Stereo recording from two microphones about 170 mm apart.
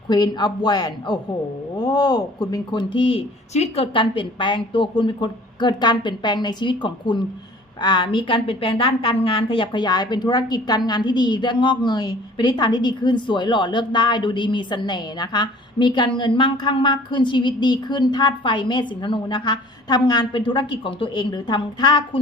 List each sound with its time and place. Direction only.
0.1 s a woman's voice: 25° left (ahead or behind)